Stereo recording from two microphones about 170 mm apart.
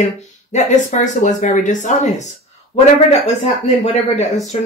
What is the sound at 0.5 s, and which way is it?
Speech, 45° left (ahead or behind).